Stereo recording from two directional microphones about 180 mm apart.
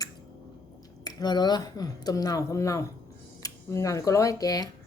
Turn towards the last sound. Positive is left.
turn(degrees=20)  # may be behind; listen again after turning